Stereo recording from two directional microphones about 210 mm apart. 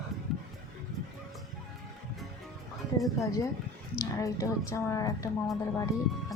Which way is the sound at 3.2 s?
15° left (ahead or behind).